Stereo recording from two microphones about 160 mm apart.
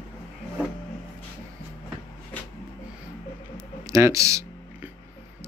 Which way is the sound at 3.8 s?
20° right (ahead or behind).